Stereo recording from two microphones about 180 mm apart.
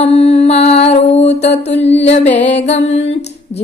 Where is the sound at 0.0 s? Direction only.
35° left (ahead or behind).